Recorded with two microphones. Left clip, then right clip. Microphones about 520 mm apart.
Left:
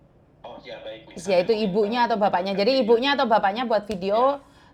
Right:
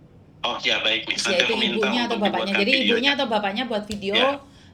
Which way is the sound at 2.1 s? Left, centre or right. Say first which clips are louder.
Left 1 dB; left.